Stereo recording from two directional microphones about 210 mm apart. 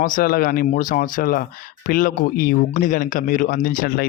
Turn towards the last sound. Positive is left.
turn(degrees=40)  # may be behind; listen again after turning